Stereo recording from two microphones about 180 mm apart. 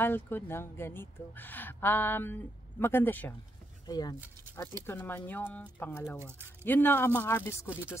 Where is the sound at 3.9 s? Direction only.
20° left (ahead or behind).